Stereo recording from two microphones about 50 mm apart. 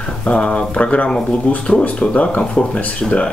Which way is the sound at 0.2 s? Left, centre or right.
Left.